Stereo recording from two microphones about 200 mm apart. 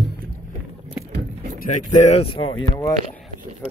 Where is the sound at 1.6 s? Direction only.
35° left (ahead or behind); by 3.0 s 20° left (ahead or behind).